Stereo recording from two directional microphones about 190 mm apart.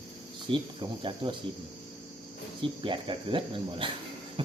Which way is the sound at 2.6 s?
25° right (ahead or behind).